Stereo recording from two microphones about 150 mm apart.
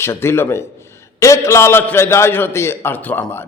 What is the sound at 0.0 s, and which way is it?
A man's voice, 15° left (ahead or behind).